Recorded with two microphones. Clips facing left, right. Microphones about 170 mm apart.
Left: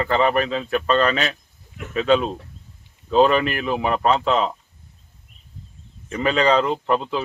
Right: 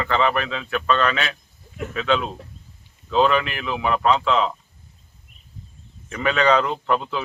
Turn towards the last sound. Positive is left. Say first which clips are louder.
# left 1 dB
turn(degrees=30)  # may be behind; listen again after turning